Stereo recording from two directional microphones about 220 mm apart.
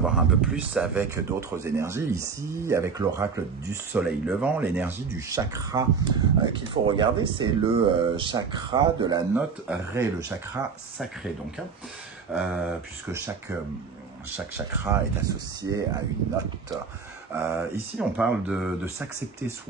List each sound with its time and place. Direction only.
0.0 s speech: 5° right (ahead or behind); by 9.4 s 20° right (ahead or behind)
9.7 s speech: 5° right (ahead or behind)
12.3 s speech: 5° right (ahead or behind)
14.9 s speech: 15° right (ahead or behind)
17.3 s speech: 5° right (ahead or behind)